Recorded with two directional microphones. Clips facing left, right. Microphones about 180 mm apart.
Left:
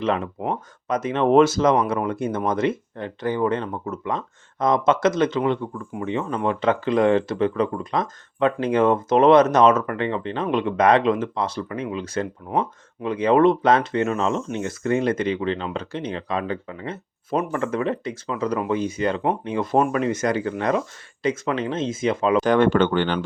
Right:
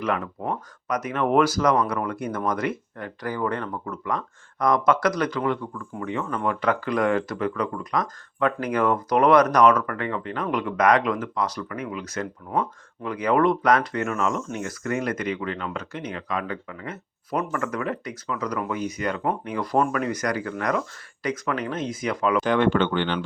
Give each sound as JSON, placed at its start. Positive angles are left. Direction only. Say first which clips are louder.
{"t": 0.0, "sound": "speech", "louder": "left 3 dB", "side_deg": 25}
{"t": 22.4, "sound": "speech", "louder": "left 3 dB", "side_deg": 45}